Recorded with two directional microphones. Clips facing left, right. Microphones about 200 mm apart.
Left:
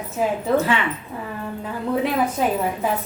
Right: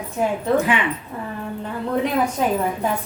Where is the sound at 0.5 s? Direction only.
15° right (ahead or behind).